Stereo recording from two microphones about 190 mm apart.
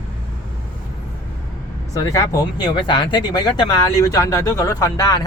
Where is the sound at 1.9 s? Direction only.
15° left (ahead or behind).